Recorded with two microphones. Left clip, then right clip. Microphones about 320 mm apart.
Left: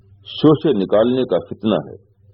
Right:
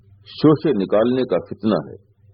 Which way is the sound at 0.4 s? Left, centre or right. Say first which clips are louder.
Left 2 dB; left.